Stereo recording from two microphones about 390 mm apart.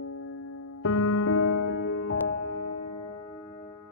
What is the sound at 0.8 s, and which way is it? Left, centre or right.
Music, left.